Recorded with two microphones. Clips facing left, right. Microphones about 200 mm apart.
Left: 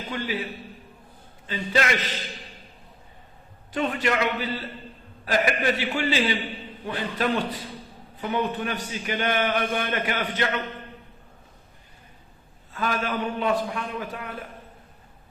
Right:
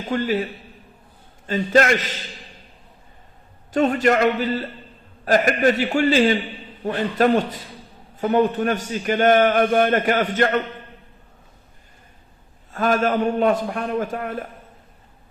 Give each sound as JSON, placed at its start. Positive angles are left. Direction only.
{"t": 0.1, "sound": "a man's voice", "side_deg": -45}
{"t": 1.5, "sound": "a man's voice", "side_deg": -45}
{"t": 3.7, "sound": "a man's voice", "side_deg": -45}
{"t": 12.7, "sound": "a man's voice", "side_deg": -45}